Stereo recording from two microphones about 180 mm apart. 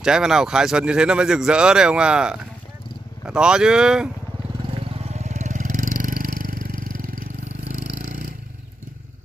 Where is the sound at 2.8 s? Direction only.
25° left (ahead or behind).